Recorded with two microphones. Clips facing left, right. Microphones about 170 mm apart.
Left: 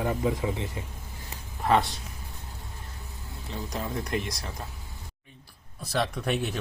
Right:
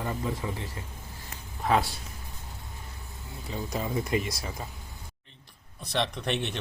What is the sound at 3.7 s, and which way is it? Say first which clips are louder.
Speech: right 2 dB; 5° right (ahead or behind).